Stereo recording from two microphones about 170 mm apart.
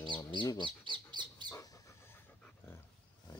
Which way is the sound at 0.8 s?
25° right (ahead or behind).